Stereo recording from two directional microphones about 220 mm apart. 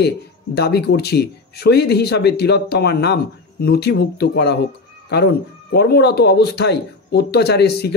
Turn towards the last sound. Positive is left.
turn(degrees=50)  # may be behind; listen again after turning